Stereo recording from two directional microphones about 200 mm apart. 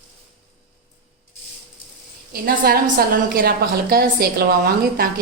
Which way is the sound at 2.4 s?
45° right (ahead or behind).